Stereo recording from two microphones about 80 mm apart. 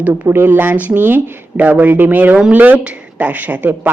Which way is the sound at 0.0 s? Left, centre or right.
Right.